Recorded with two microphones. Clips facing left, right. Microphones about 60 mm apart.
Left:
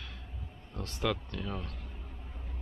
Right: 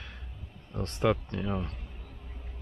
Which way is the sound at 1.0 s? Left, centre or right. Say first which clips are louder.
Right 6 dB; right.